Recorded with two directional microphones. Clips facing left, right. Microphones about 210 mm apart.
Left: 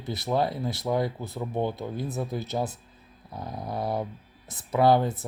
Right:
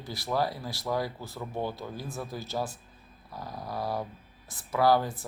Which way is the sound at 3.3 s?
20° left (ahead or behind).